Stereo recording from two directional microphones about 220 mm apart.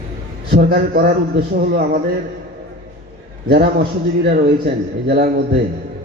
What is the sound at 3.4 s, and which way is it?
A man's voice, 45° right (ahead or behind).